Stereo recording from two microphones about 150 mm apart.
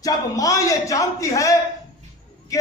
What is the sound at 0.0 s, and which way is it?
A man's voice, 25° left (ahead or behind).